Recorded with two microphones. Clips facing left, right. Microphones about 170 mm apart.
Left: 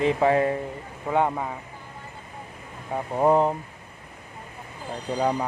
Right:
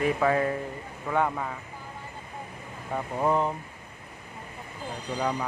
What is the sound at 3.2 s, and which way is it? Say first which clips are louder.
Speech: left 6 dB; 35° left (ahead or behind).